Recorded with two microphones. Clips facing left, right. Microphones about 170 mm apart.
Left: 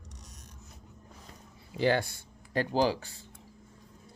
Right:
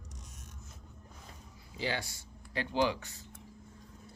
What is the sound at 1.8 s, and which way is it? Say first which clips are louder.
Speech: left 9 dB; 55° left (ahead or behind).